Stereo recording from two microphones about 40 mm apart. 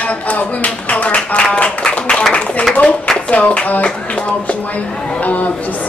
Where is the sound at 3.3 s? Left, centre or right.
Left.